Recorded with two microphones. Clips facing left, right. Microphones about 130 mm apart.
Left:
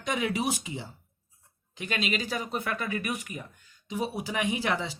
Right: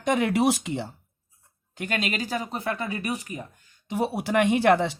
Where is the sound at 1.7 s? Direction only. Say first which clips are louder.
Right 2 dB; 50° right (ahead or behind); by 3.4 s 35° right (ahead or behind).